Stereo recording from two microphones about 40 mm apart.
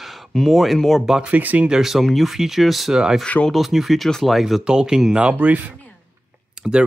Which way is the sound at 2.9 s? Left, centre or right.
Centre.